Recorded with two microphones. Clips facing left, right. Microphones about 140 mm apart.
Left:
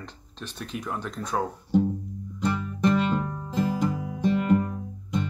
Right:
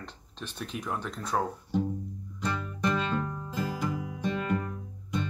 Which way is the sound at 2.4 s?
25° left (ahead or behind).